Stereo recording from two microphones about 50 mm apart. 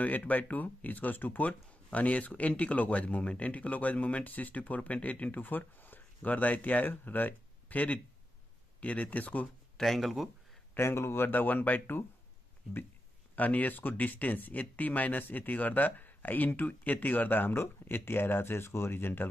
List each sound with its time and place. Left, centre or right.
0.0 s speech: left
9.8 s speech: centre
10.8 s speech: left
13.4 s speech: left